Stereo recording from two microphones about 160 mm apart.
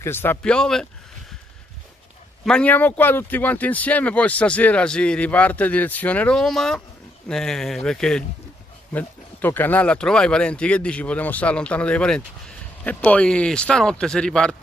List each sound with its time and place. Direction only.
0.0 s speech: 15° left (ahead or behind)
2.4 s speech: 5° left (ahead or behind)